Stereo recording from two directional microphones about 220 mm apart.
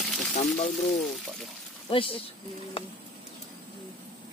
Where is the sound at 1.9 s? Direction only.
25° left (ahead or behind).